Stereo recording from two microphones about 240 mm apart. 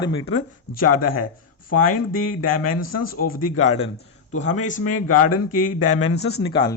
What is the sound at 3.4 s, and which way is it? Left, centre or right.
Speech, left.